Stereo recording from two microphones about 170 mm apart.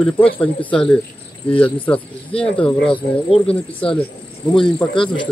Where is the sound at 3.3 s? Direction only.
30° left (ahead or behind).